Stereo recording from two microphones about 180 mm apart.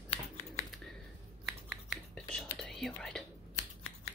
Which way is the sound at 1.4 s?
Centre (ahead or behind).